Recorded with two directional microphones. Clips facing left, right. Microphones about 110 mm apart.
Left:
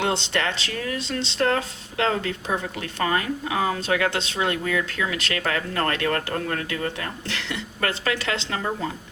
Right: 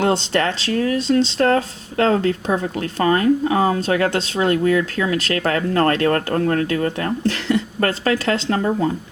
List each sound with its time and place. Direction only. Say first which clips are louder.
0.0 s speech: right 6 dB; 40° right (ahead or behind)